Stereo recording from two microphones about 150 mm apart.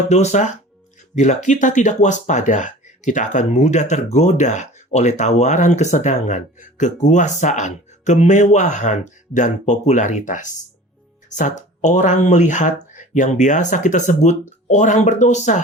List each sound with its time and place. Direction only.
0.1 s speech: 50° left (ahead or behind)